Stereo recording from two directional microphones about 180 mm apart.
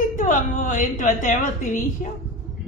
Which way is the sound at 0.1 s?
50° left (ahead or behind).